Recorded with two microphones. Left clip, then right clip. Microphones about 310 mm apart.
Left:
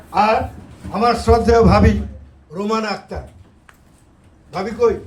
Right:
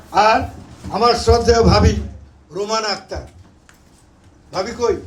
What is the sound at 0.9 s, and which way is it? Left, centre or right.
A man's voice, left.